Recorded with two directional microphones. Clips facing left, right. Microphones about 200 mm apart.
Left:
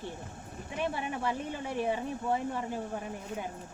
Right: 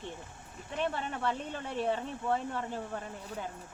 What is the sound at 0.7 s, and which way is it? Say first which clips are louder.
A woman's voice: even; 10° left (ahead or behind).